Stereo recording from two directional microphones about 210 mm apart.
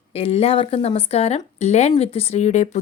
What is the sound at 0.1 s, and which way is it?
Speech, 30° left (ahead or behind).